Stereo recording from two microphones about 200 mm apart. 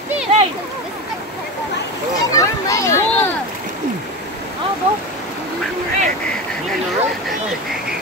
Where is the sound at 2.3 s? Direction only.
15° left (ahead or behind).